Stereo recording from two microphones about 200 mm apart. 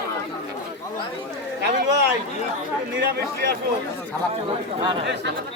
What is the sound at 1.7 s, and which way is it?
Speech, 60° right (ahead or behind).